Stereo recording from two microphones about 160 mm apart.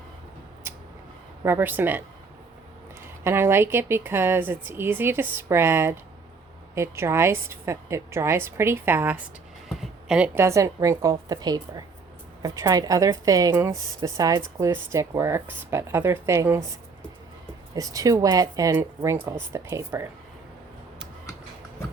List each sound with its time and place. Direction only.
1.5 s speech: 15° right (ahead or behind)
3.2 s speech: 15° right (ahead or behind)
9.6 s a sound: 5° right (ahead or behind)
10.3 s speech: 20° right (ahead or behind)
17.7 s speech: 20° right (ahead or behind)